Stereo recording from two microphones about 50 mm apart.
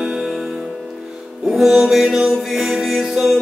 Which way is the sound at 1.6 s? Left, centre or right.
Centre.